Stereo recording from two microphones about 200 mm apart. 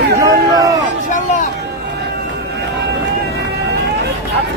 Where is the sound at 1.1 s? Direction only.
40° left (ahead or behind).